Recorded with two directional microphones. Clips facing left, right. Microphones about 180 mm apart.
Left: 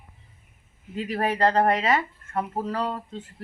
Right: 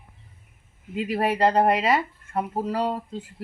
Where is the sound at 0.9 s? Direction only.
10° right (ahead or behind).